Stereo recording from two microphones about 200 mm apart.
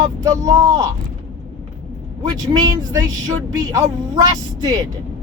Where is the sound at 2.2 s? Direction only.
20° right (ahead or behind).